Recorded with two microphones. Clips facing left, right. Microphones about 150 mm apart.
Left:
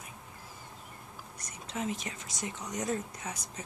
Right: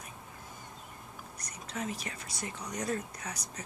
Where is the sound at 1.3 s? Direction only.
25° left (ahead or behind).